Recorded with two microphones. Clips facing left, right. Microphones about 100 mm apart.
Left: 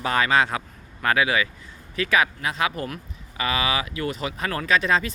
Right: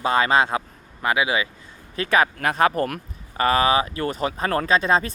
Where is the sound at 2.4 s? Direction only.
50° right (ahead or behind).